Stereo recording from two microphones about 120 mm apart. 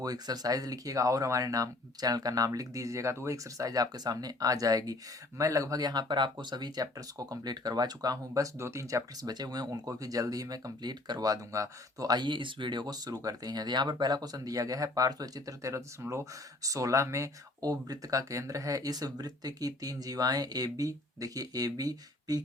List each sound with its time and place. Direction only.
0.0 s speech: 30° right (ahead or behind)
8.3 s speech: 25° right (ahead or behind)